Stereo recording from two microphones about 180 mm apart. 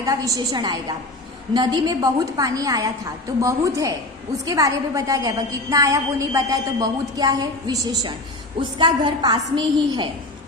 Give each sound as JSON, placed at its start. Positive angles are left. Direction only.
{"t": 0.0, "sound": "a woman's voice", "side_deg": -20}